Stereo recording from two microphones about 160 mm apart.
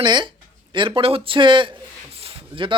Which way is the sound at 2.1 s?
35° right (ahead or behind).